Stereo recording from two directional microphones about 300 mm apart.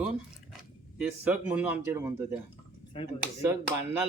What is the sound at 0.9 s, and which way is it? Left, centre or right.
Speech, centre.